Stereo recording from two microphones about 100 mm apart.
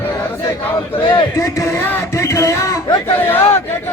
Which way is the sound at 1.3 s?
30° left (ahead or behind).